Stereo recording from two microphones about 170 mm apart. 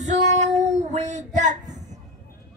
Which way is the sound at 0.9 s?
45° right (ahead or behind).